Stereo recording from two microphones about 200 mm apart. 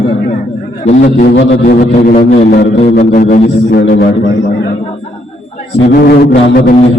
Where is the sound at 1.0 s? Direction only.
55° left (ahead or behind).